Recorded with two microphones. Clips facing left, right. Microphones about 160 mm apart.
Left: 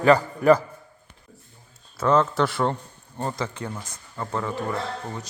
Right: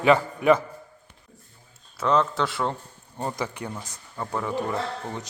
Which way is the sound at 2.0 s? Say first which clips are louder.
Left 2 dB; centre (ahead or behind).